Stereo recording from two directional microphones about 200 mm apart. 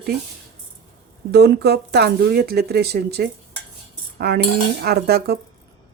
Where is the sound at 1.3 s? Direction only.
55° right (ahead or behind).